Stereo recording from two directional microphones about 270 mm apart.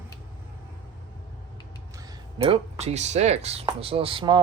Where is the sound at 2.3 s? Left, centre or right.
Centre.